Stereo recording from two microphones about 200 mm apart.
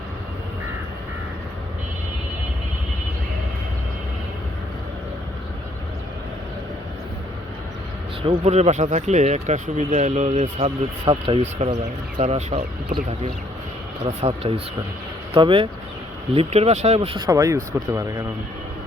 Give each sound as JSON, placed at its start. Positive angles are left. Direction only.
{"t": 8.2, "sound": "speech", "side_deg": -30}
{"t": 17.2, "sound": "speech", "side_deg": -15}